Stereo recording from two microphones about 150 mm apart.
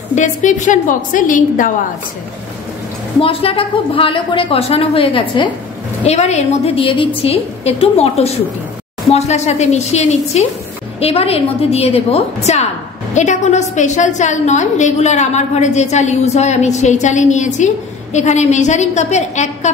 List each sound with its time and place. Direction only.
0.1 s a woman's voice: 55° left (ahead or behind)
3.2 s a woman's voice: 35° left (ahead or behind)
6.0 s a woman's voice: 45° left (ahead or behind)